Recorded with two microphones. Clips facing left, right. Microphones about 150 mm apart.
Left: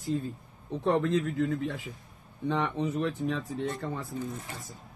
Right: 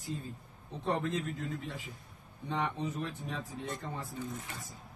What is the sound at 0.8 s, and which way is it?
Speech, 90° left.